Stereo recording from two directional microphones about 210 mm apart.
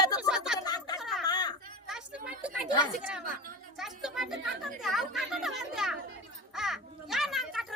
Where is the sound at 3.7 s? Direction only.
Centre (ahead or behind).